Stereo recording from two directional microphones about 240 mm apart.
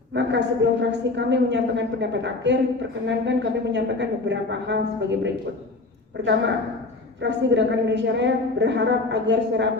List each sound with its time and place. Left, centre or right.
0.1 s a woman's voice: right
7.2 s a woman's voice: right